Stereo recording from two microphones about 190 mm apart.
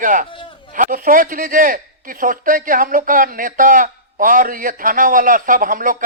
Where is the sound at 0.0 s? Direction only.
45° right (ahead or behind).